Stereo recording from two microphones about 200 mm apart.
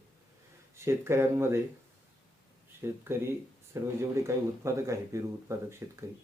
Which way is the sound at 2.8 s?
10° right (ahead or behind).